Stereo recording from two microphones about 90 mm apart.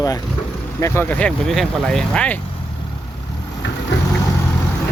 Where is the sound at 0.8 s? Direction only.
25° left (ahead or behind).